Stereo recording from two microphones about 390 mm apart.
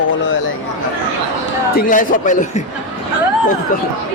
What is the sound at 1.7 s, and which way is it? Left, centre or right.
Speech, left.